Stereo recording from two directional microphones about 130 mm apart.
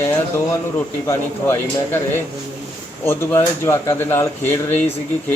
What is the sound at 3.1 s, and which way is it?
A man's voice, 20° left (ahead or behind).